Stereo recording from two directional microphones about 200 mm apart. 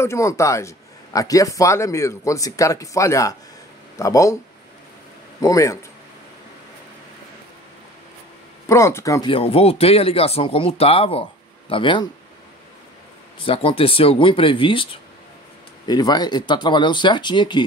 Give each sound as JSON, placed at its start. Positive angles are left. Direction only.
{"t": 0.0, "sound": "a man's voice", "side_deg": 15}
{"t": 5.4, "sound": "a man's voice", "side_deg": 15}
{"t": 8.6, "sound": "a man's voice", "side_deg": 15}
{"t": 9.3, "sound": "speech", "side_deg": 30}
{"t": 13.4, "sound": "speech", "side_deg": 25}
{"t": 15.9, "sound": "speech", "side_deg": 20}